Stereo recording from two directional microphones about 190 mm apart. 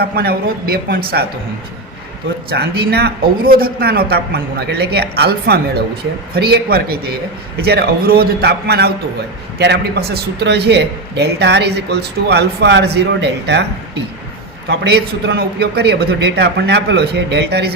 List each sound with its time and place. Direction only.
0.0 s a woman's voice: 55° right (ahead or behind)
2.5 s a woman's voice: 55° right (ahead or behind)